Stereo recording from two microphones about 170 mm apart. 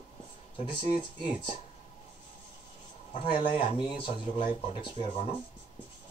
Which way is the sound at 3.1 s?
30° left (ahead or behind).